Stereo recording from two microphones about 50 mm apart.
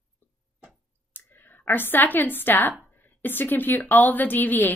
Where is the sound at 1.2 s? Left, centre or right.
Left.